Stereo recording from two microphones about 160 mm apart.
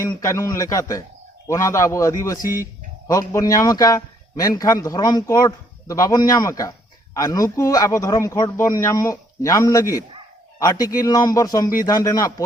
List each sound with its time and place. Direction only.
0.0 s a man's voice: 20° left (ahead or behind)